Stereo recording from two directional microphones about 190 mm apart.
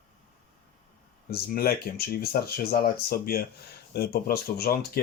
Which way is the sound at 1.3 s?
55° left (ahead or behind).